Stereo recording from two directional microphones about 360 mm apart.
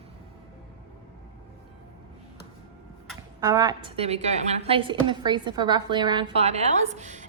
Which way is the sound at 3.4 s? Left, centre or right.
Centre.